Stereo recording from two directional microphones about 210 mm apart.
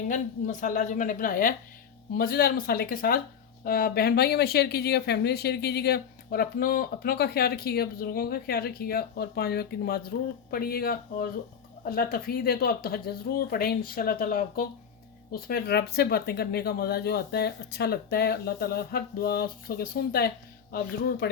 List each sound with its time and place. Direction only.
0.1 s a woman's voice: 35° left (ahead or behind)